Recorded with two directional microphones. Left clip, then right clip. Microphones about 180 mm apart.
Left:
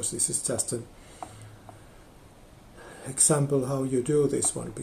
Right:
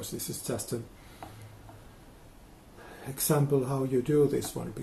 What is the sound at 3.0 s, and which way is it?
Speech, 15° left (ahead or behind).